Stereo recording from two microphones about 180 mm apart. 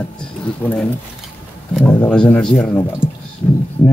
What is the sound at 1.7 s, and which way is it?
Speech, 5° left (ahead or behind).